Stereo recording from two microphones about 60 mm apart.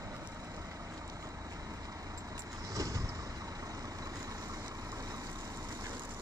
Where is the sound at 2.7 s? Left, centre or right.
Right.